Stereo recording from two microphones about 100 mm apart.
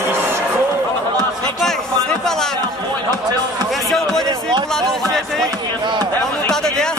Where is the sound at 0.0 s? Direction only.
25° right (ahead or behind).